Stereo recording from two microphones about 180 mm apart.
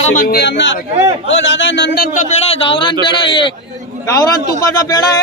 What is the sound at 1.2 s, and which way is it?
Speech, 90° left.